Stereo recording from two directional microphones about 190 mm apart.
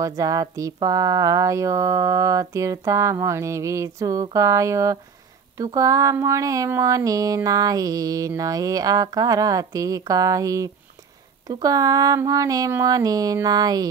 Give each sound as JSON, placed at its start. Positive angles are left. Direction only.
{"t": 0.0, "sound": "speech", "side_deg": -20}